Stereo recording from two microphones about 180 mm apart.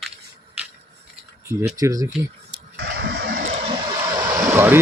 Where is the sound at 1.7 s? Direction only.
20° right (ahead or behind).